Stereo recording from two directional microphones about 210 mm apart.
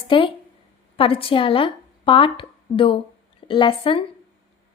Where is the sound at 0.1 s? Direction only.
25° left (ahead or behind).